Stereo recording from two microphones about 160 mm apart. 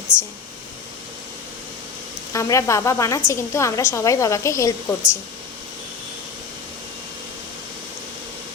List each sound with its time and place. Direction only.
0.1 s speech: 5° right (ahead or behind)
2.3 s a woman's voice: 20° left (ahead or behind)